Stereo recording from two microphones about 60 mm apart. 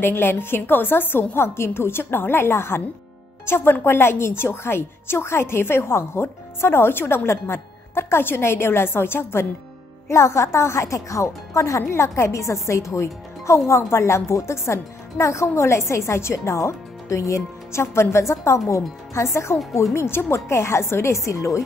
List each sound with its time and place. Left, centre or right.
0.0 s a woman's voice: left
10.0 s speech: left
11.9 s a woman's voice: left